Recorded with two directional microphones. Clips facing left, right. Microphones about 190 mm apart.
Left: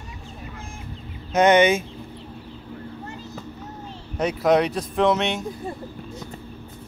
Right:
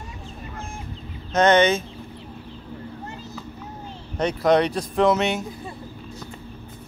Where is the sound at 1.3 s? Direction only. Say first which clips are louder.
Left 1 dB; 10° left (ahead or behind).